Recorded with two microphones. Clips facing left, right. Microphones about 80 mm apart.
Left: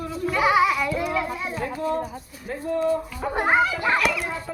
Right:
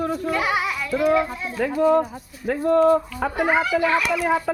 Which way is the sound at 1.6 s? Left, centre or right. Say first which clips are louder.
Right 10 dB; right.